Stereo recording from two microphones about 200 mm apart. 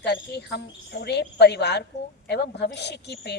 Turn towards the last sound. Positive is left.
turn(degrees=55)  # may be behind; listen again after turning